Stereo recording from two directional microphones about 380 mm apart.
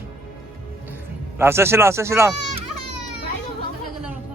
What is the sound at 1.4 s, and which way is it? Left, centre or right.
Speech, centre.